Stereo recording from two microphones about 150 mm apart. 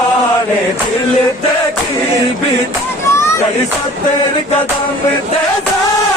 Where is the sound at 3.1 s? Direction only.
20° left (ahead or behind).